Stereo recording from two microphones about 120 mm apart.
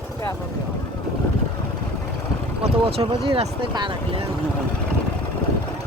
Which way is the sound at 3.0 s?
45° right (ahead or behind).